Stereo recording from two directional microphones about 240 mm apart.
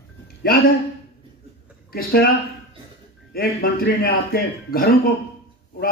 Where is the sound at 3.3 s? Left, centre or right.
Left.